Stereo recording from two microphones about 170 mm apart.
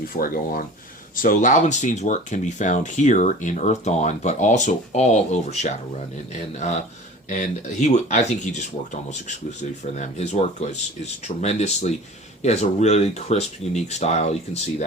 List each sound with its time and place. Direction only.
0.1 s speech: 60° left (ahead or behind)